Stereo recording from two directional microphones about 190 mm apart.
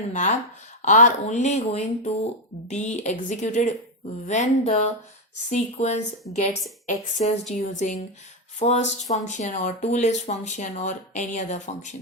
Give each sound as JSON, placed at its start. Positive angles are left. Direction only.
{"t": 0.8, "sound": "speech", "side_deg": 40}